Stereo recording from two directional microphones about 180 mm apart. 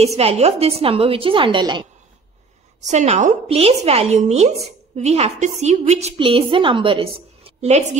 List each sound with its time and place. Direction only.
0.0 s a woman's voice: 35° right (ahead or behind)
2.8 s a woman's voice: 40° right (ahead or behind)